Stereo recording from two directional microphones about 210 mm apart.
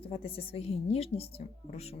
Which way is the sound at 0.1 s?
25° left (ahead or behind).